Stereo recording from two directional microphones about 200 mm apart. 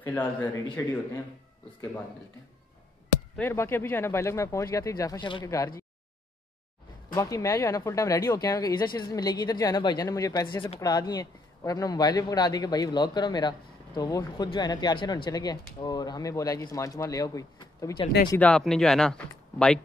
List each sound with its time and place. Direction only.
0.0 s speech: 10° left (ahead or behind)
3.3 s speech: 10° left (ahead or behind)
7.1 s speech: 15° left (ahead or behind)
18.3 s speech: 5° left (ahead or behind)